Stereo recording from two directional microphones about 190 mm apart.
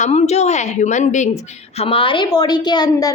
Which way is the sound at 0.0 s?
35° left (ahead or behind).